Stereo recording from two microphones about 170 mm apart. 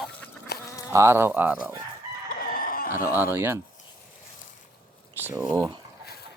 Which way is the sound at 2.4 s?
55° left (ahead or behind).